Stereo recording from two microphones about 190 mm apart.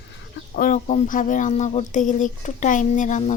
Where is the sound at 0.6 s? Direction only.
40° left (ahead or behind).